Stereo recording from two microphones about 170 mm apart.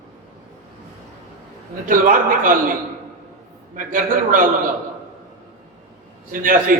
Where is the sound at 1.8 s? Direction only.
55° right (ahead or behind).